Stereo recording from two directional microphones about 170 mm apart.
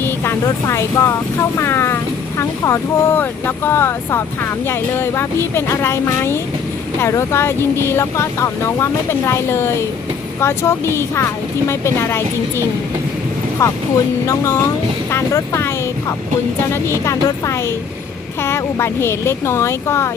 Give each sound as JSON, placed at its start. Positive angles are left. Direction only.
{"t": 0.0, "sound": "speech", "side_deg": 15}